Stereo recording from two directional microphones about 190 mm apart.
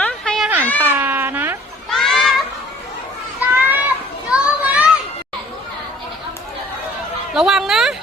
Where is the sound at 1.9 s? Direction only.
Centre (ahead or behind).